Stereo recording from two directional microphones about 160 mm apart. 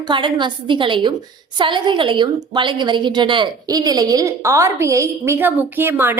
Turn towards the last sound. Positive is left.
turn(degrees=-10)  # may be behind; listen again after turning